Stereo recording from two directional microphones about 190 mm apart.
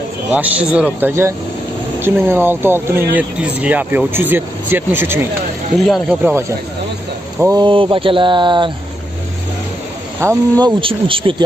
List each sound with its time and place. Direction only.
0.3 s speech: 5° right (ahead or behind)
5.9 s speech: centre (ahead or behind)
7.3 s speech: 20° right (ahead or behind)
10.2 s speech: 15° right (ahead or behind)
10.6 s speech: 25° right (ahead or behind)